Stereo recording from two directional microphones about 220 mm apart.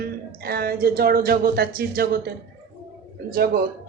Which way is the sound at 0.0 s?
45° right (ahead or behind).